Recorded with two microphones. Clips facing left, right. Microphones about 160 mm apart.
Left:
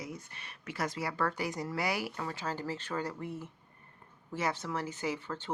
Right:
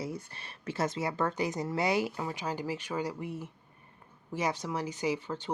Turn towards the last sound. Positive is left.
turn(degrees=-15)  # may be behind; listen again after turning